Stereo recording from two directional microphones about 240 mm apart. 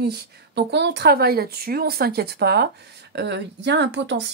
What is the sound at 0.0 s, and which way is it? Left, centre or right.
Speech, right.